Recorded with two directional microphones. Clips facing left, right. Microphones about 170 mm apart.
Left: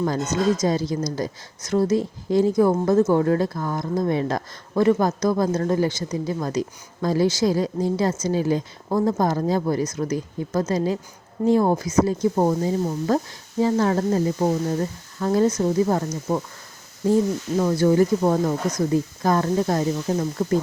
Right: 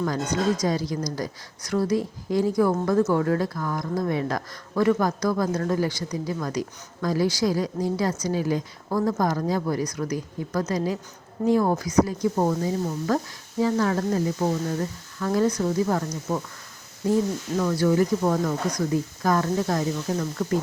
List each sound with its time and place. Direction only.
0.0 s speech: 25° left (ahead or behind)
17.6 s speech: 25° left (ahead or behind)